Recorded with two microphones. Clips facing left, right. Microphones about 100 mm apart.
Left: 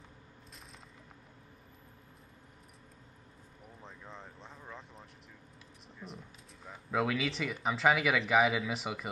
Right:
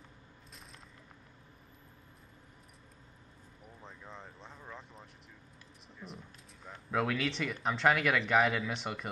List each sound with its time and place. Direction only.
3.8 s speech: centre (ahead or behind)